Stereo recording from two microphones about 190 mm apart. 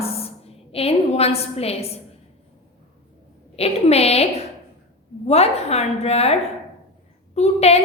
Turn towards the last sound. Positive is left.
turn(degrees=35)  # may be behind; listen again after turning